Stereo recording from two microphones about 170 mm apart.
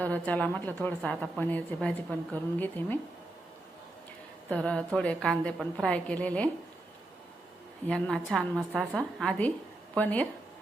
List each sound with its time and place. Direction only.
0.0 s a woman's voice: 10° left (ahead or behind)
4.4 s a woman's voice: 5° left (ahead or behind)
7.9 s a woman's voice: 5° left (ahead or behind)
8.7 s a woman's voice: 10° right (ahead or behind)
9.0 s a woman's voice: 5° left (ahead or behind)